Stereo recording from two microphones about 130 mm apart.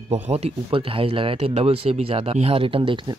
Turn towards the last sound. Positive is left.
turn(degrees=-40)  # may be behind; listen again after turning